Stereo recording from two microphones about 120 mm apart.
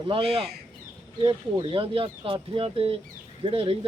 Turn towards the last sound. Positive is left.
turn(degrees=-50)  # may be behind; listen again after turning